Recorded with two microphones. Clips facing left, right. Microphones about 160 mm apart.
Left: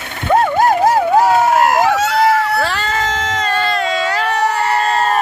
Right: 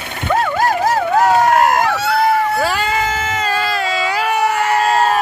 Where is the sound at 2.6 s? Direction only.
10° right (ahead or behind).